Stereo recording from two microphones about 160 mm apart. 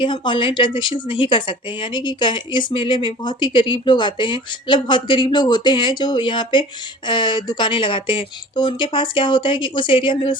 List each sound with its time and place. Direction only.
0.0 s speech: 30° left (ahead or behind)